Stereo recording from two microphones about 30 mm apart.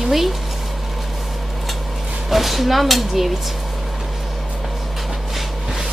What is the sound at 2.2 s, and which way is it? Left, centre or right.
Speech, centre.